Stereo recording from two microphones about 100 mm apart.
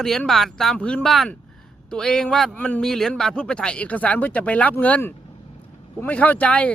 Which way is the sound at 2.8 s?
5° left (ahead or behind).